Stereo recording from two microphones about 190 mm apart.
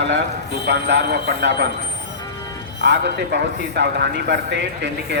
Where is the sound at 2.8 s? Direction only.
65° right (ahead or behind).